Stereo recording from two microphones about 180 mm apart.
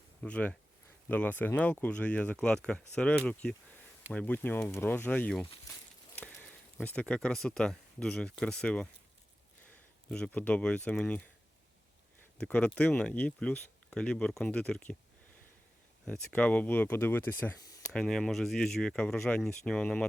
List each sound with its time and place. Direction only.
0.2 s speech: 5° left (ahead or behind)
10.1 s speech: 5° left (ahead or behind)
12.4 s speech: 5° left (ahead or behind)
16.3 s speech: 10° left (ahead or behind)
17.6 s a sound: 20° left (ahead or behind)
17.9 s speech: 5° left (ahead or behind)